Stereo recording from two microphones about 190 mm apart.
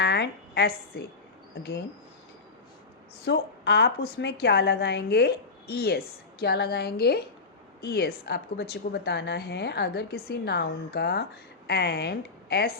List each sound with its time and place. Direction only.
0.0 s a woman's voice: 60° left (ahead or behind)
3.2 s a woman's voice: 60° left (ahead or behind)